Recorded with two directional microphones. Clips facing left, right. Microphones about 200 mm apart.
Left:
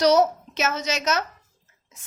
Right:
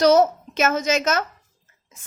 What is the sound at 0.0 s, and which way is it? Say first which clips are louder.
A woman's voice: right 3 dB; 50° right (ahead or behind).